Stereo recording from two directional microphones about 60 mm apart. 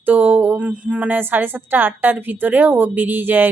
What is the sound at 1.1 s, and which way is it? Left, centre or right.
A woman's voice, right.